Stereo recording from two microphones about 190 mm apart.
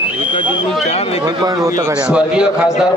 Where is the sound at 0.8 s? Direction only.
30° left (ahead or behind).